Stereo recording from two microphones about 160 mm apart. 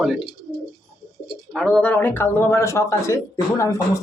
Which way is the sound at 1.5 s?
5° left (ahead or behind).